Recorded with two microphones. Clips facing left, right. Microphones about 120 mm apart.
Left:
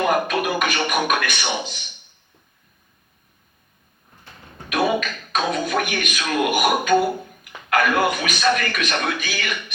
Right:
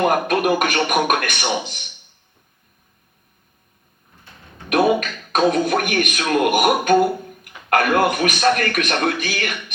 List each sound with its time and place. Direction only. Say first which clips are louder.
0.3 s a man's voice: right 4 dB; 50° right (ahead or behind)
4.7 s a man's voice: right 4 dB; 50° right (ahead or behind)